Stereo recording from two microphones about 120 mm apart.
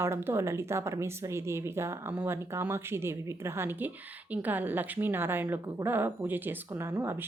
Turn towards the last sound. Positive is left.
turn(degrees=-20)  # may be behind; listen again after turning